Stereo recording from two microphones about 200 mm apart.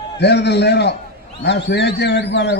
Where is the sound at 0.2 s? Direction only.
55° left (ahead or behind).